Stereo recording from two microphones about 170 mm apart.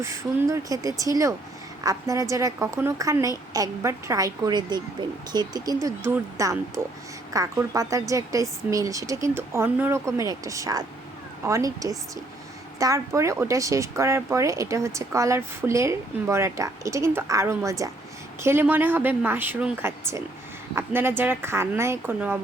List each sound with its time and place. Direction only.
0.0 s a woman's voice: 15° right (ahead or behind)